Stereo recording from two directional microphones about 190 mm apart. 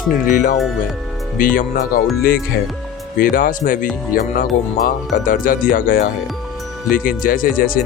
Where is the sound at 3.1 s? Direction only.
50° left (ahead or behind).